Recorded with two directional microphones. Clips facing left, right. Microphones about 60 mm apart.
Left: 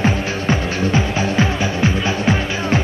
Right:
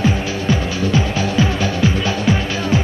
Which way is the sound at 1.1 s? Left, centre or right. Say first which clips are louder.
Even; left.